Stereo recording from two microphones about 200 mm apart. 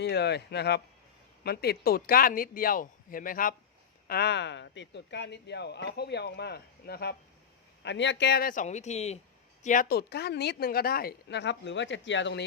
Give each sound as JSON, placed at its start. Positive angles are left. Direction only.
{"t": 0.0, "sound": "a man's voice", "side_deg": 55}
{"t": 4.1, "sound": "a man's voice", "side_deg": 55}
{"t": 9.6, "sound": "speech", "side_deg": 45}